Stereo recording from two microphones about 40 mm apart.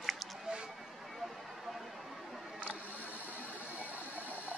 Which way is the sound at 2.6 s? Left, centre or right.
Right.